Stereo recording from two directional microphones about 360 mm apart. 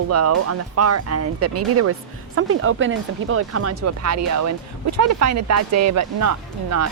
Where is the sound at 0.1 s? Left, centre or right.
Right.